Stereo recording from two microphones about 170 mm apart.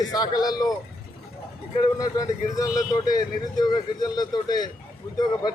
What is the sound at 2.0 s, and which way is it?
Speech, 20° left (ahead or behind).